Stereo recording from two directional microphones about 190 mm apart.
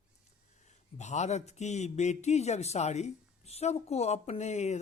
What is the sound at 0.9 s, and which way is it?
Speech, 35° left (ahead or behind).